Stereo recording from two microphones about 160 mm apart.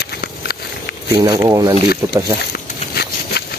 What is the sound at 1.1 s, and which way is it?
Speech, 25° right (ahead or behind).